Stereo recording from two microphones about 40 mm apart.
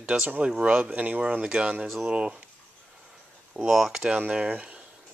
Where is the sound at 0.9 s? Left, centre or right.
Right.